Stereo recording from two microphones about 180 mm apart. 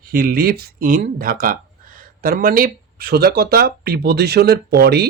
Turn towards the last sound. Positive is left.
turn(degrees=-60)  # may be behind; listen again after turning